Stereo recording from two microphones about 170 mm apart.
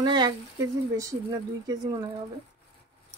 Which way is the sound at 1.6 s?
20° right (ahead or behind).